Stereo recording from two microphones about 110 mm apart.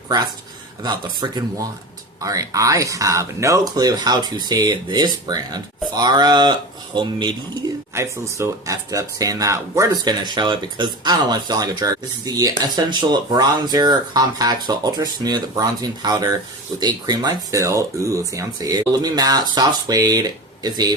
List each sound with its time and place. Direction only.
0.8 s speech: 40° right (ahead or behind)
7.9 s speech: 25° right (ahead or behind)